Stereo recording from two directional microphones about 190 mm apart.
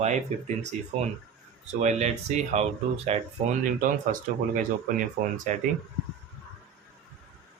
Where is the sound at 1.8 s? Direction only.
35° right (ahead or behind).